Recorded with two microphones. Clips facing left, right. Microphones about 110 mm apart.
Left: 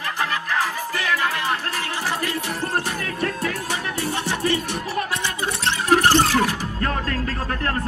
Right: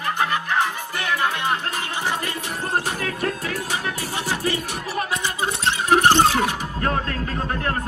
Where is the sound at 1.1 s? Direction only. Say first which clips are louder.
Right 2 dB; 30° right (ahead or behind).